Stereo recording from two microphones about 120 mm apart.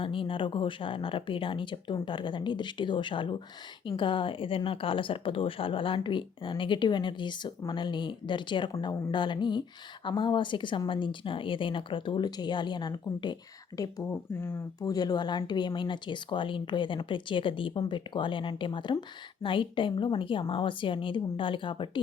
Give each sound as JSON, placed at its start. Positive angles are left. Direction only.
{"t": 0.0, "sound": "a woman's voice", "side_deg": 45}
{"t": 14.1, "sound": "speech", "side_deg": 20}
{"t": 14.8, "sound": "speech", "side_deg": 35}